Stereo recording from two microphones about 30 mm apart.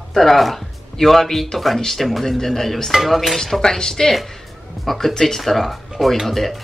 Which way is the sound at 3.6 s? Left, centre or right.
Left.